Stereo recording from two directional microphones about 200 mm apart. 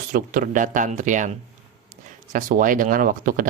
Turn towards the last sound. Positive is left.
turn(degrees=-45)  # may be behind; listen again after turning